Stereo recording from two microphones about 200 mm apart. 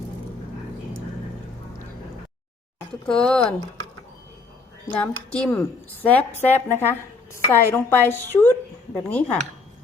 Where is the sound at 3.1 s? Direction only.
5° left (ahead or behind).